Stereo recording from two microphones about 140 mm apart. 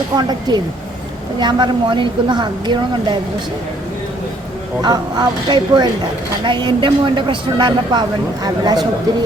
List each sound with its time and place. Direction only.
0.2 s a woman's voice: 30° right (ahead or behind)
4.8 s a woman's voice: 30° right (ahead or behind)